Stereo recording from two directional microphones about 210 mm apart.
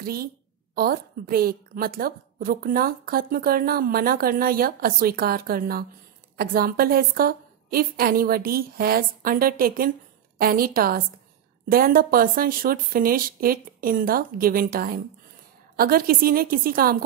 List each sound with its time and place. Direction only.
0.0 s a woman's voice: 45° right (ahead or behind)